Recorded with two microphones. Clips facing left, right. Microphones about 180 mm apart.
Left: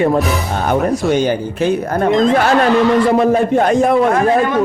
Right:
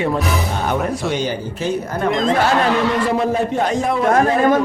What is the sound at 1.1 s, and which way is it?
Speech, 55° left (ahead or behind).